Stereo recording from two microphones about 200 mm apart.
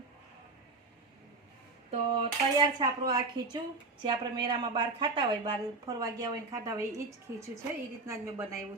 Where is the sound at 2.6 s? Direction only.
20° right (ahead or behind).